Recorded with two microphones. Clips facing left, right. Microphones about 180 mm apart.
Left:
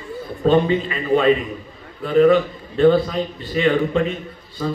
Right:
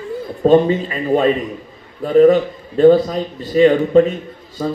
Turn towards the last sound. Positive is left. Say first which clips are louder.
# right 3 dB
turn(degrees=-40)  # may be behind; listen again after turning